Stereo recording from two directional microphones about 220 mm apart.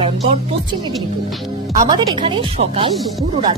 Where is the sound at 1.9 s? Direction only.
20° right (ahead or behind).